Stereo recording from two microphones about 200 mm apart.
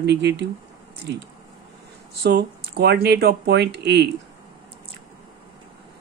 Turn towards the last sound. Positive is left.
turn(degrees=-60)  # may be behind; listen again after turning